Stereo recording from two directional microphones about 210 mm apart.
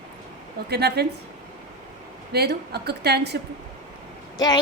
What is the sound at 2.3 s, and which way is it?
A woman's voice, 50° right (ahead or behind).